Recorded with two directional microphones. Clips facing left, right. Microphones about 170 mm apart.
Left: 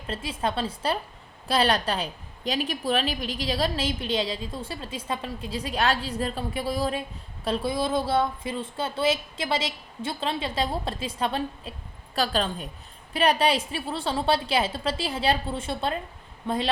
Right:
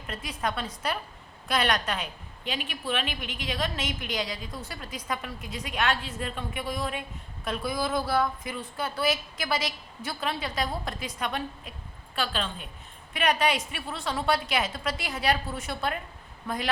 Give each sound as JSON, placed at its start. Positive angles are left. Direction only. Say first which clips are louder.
{"t": 0.1, "sound": "a woman's voice", "louder": "left 3 dB", "side_deg": 30}